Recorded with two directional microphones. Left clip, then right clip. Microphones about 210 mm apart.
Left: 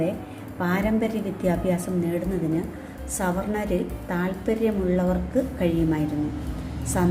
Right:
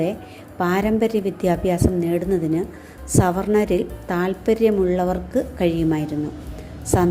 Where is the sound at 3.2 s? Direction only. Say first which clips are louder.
Right 8 dB; 45° right (ahead or behind).